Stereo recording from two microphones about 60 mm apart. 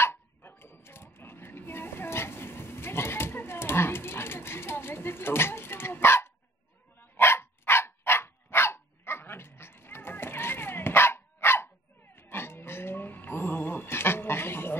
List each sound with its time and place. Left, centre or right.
0.0 s dog: left